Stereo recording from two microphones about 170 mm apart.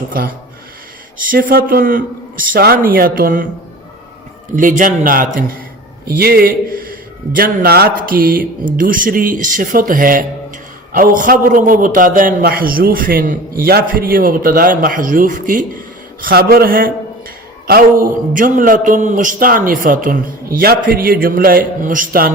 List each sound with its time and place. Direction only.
0.1 s speech: 55° right (ahead or behind)
4.8 s a man's voice: 55° right (ahead or behind)